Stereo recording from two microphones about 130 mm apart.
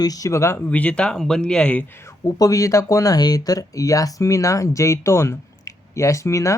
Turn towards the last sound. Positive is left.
turn(degrees=25)  # may be behind; listen again after turning